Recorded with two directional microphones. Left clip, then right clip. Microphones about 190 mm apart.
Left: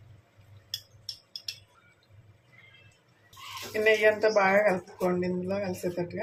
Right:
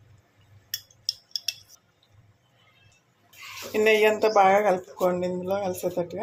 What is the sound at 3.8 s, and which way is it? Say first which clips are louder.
Speech: right 2 dB; 40° right (ahead or behind).